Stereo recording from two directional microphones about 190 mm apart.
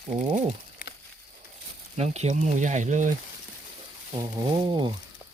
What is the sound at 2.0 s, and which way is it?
Speech, 35° right (ahead or behind).